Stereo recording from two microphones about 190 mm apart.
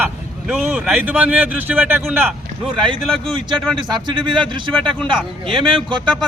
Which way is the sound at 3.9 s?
25° right (ahead or behind).